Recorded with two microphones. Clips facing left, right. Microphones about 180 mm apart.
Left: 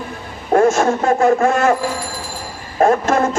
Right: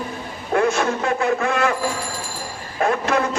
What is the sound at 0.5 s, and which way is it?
Speech, 45° left (ahead or behind).